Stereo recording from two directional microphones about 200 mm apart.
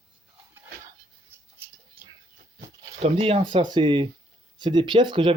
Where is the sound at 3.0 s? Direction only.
30° right (ahead or behind).